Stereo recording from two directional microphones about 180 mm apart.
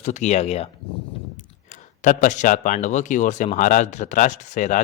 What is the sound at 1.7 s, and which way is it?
Speech, 45° left (ahead or behind).